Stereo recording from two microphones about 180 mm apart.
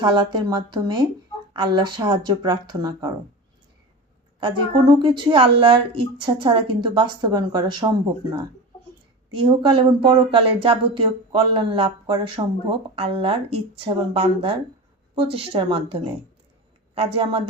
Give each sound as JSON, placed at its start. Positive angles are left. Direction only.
{"t": 0.0, "sound": "speech", "side_deg": -25}
{"t": 4.4, "sound": "a woman's voice", "side_deg": -25}